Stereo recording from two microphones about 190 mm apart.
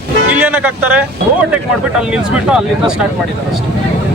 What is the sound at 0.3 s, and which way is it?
Speech, 10° right (ahead or behind).